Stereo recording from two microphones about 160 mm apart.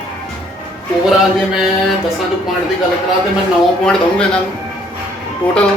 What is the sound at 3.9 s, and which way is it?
Speech, 5° left (ahead or behind).